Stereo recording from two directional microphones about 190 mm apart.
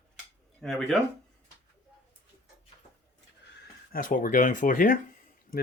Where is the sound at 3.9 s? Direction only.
45° left (ahead or behind).